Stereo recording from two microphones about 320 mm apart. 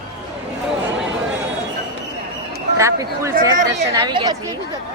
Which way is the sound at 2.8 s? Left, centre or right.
Centre.